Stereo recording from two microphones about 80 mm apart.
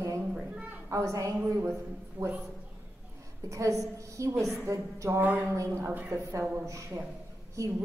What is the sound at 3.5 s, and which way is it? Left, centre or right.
Speech, right.